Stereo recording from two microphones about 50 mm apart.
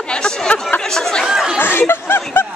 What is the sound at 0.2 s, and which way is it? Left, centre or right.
Chatter, left.